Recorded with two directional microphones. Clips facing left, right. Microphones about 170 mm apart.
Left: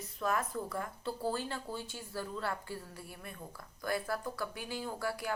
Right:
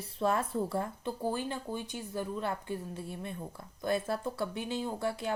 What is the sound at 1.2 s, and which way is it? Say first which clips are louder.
A woman's voice: right 3 dB; 15° right (ahead or behind).